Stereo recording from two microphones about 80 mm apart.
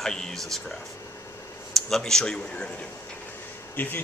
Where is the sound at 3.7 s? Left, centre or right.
Left.